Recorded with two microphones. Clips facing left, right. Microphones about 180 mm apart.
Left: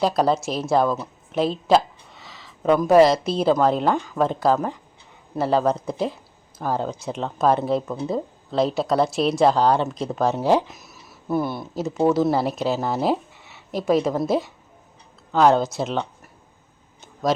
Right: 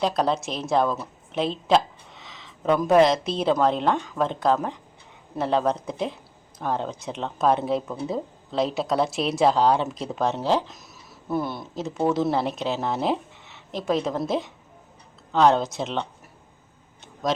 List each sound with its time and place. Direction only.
0.0 s a woman's voice: 5° left (ahead or behind)